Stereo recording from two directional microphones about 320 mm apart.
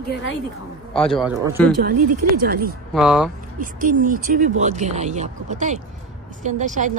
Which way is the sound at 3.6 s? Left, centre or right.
Right.